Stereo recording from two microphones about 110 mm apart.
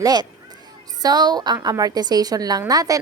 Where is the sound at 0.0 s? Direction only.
35° right (ahead or behind).